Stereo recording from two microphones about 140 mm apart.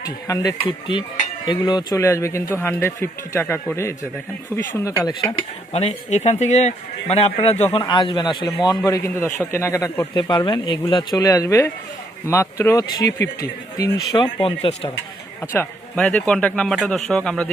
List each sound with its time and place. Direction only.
0.0 s speech: 25° left (ahead or behind)
4.8 s speech: 20° left (ahead or behind)
5.7 s speech: 50° left (ahead or behind)
7.9 s speech: 35° left (ahead or behind)
10.2 s speech: 35° left (ahead or behind)
15.4 s a man's voice: 10° left (ahead or behind)